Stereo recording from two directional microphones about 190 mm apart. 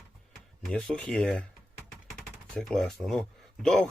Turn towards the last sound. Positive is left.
turn(degrees=5)  # may be behind; listen again after turning